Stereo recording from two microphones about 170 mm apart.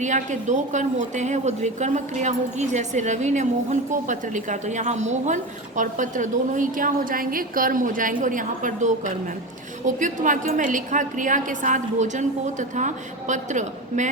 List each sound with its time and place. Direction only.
0.0 s speech: 45° right (ahead or behind)